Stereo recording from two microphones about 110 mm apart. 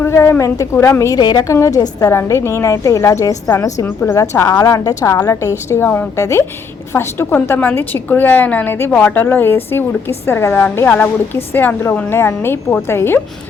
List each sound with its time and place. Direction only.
0.0 s a woman's voice: 25° left (ahead or behind)
1.2 s a woman's voice: 40° left (ahead or behind)
1.5 s a woman's voice: 30° left (ahead or behind)